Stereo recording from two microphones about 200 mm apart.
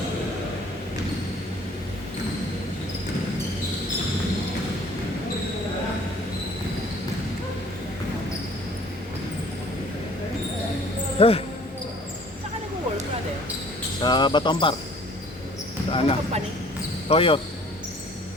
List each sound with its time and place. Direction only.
11.2 s speech: 30° left (ahead or behind)
14.0 s speech: 20° left (ahead or behind)
15.9 s speech: 30° left (ahead or behind)